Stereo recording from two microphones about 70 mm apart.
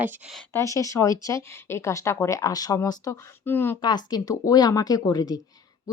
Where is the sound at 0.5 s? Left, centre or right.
Left.